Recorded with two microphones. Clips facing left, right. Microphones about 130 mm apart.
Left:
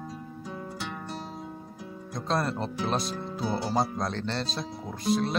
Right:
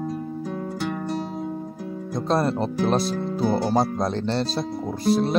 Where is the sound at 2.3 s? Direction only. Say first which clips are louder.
Right 6 dB; 35° right (ahead or behind); by 3.9 s 55° right (ahead or behind).